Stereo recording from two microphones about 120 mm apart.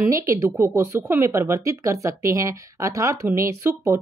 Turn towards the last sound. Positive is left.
turn(degrees=-25)  # may be behind; listen again after turning